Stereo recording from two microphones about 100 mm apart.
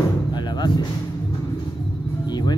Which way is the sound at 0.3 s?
45° left (ahead or behind).